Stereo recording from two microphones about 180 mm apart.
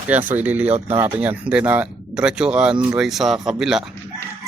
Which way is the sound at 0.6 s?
35° right (ahead or behind).